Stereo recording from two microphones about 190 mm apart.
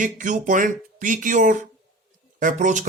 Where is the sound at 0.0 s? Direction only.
40° right (ahead or behind).